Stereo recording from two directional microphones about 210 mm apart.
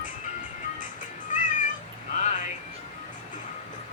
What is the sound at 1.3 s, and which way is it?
Music, 35° left (ahead or behind).